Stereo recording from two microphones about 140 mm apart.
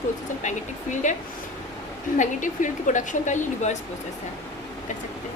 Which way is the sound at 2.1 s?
65° left (ahead or behind).